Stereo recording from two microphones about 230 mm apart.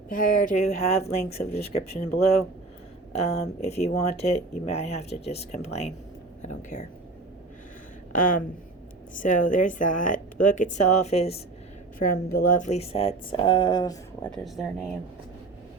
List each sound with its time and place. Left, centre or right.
0.1 s speech: left
1.8 s speech: left
3.2 s a woman's voice: left
8.1 s speech: left
11.9 s a woman's voice: left; by 13.9 s centre
14.3 s speech: centre